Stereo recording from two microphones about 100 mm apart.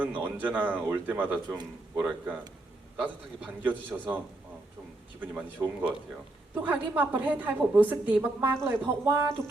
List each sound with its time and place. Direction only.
0.0 s speech: 15° right (ahead or behind)
5.2 s speech: 15° right (ahead or behind)
5.6 s speech: 35° right (ahead or behind)
6.5 s speech: 20° right (ahead or behind)